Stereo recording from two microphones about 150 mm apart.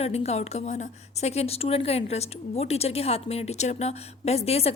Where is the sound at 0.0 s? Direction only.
45° left (ahead or behind).